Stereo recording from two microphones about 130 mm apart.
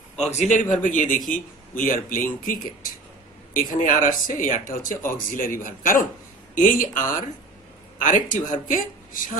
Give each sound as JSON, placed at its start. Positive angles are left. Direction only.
{"t": 0.3, "sound": "a man's voice", "side_deg": 65}
{"t": 0.8, "sound": "a man's voice", "side_deg": 85}
{"t": 8.0, "sound": "speech", "side_deg": 80}